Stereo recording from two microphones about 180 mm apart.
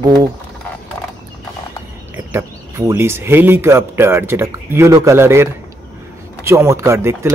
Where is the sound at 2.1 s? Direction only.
15° right (ahead or behind).